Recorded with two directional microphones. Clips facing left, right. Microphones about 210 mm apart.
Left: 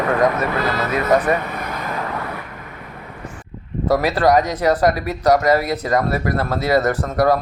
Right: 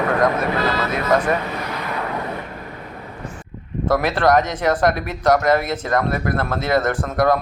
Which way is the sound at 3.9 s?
10° left (ahead or behind).